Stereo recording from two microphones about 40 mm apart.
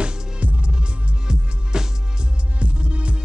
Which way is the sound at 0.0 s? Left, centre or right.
Right.